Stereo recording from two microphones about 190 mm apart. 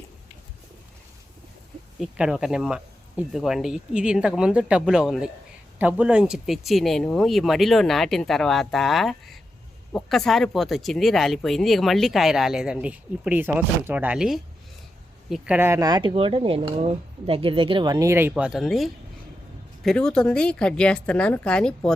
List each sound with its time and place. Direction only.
2.0 s speech: 5° right (ahead or behind)